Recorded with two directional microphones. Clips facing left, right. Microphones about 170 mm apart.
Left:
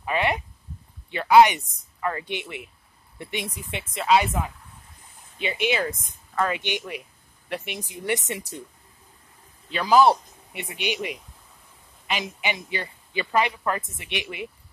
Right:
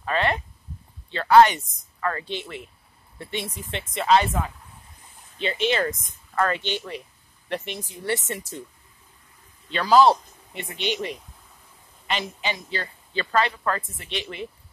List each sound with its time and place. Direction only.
0.0 s a sound: 15° left (ahead or behind)
1.1 s speech: 15° left (ahead or behind)
9.7 s speech: 10° left (ahead or behind)